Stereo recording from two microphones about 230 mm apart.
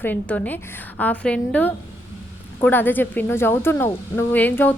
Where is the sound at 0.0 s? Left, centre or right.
Centre.